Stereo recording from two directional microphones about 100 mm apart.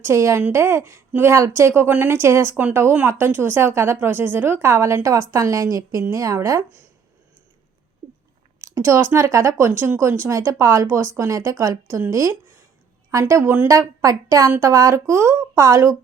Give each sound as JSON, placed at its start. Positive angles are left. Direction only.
{"t": 0.0, "sound": "a woman's voice", "side_deg": -30}
{"t": 8.6, "sound": "a woman's voice", "side_deg": -30}
{"t": 13.1, "sound": "a woman's voice", "side_deg": -30}
{"t": 13.7, "sound": "a woman's voice", "side_deg": -35}